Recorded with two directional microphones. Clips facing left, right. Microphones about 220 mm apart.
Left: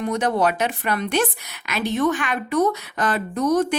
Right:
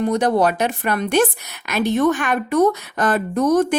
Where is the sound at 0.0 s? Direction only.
35° right (ahead or behind).